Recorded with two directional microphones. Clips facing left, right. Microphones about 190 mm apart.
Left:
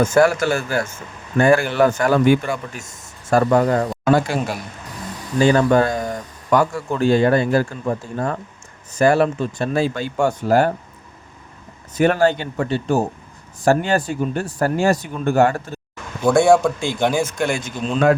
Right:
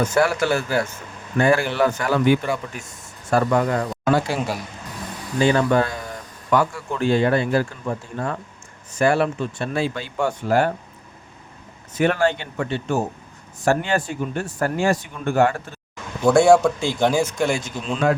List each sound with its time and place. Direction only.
0.0 s speech: 45° left (ahead or behind)
4.3 s speech: 5° right (ahead or behind)
5.4 s speech: 40° left (ahead or behind)
11.9 s speech: 40° left (ahead or behind)
16.2 s speech: centre (ahead or behind)